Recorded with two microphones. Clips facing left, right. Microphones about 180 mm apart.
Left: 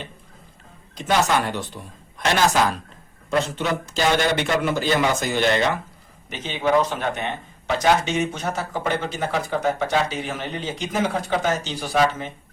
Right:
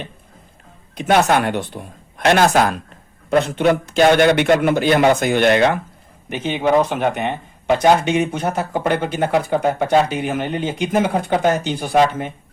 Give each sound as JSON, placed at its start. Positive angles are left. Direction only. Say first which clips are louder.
{"t": 0.9, "sound": "speech", "louder": "right 5 dB", "side_deg": -60}
{"t": 6.9, "sound": "speech", "louder": "right 6 dB", "side_deg": -15}
{"t": 7.8, "sound": "speech", "louder": "right 4 dB", "side_deg": -55}